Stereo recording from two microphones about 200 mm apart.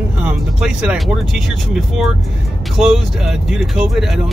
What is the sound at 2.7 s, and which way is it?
Speech, centre (ahead or behind).